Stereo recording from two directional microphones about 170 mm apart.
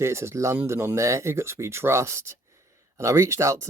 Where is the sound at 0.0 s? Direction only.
15° right (ahead or behind).